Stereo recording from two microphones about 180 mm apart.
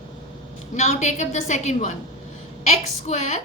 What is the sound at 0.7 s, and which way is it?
A woman's voice, 40° left (ahead or behind).